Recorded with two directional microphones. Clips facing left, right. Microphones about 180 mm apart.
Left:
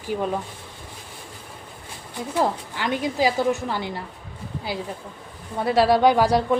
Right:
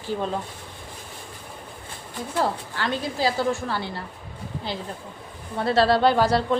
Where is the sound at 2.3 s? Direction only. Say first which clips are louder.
Left 2 dB; 15° left (ahead or behind).